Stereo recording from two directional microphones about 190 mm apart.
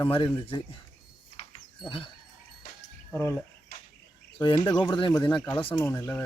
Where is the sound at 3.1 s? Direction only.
15° left (ahead or behind).